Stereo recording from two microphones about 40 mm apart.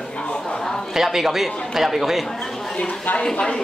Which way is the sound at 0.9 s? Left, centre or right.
Centre.